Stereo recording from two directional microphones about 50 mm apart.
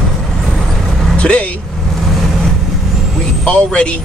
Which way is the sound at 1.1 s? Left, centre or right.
Left.